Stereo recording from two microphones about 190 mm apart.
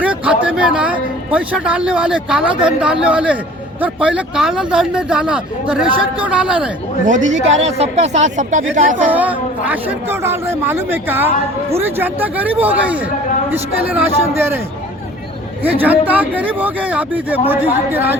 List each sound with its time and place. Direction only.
0.0 s a man's voice: 5° right (ahead or behind)
7.3 s a woman's voice: 35° right (ahead or behind)
9.0 s a woman's voice: 10° right (ahead or behind)
15.6 s a woman's voice: 10° right (ahead or behind)